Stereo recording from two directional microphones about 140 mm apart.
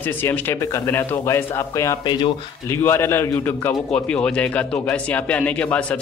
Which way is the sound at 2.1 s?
35° left (ahead or behind).